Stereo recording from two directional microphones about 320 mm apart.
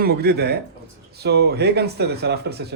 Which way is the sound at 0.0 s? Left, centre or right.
Right.